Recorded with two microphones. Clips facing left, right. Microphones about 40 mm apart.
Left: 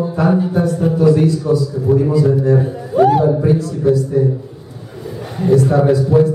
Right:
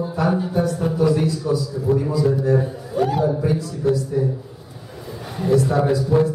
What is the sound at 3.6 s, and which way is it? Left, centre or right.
Speech, centre.